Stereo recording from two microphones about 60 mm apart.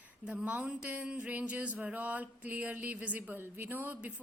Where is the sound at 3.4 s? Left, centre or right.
Right.